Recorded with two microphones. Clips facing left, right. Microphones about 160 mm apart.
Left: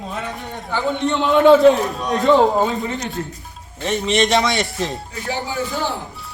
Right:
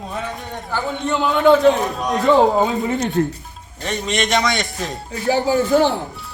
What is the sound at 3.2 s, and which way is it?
Speech, 50° right (ahead or behind).